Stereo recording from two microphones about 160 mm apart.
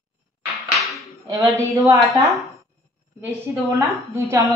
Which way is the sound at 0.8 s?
Centre (ahead or behind).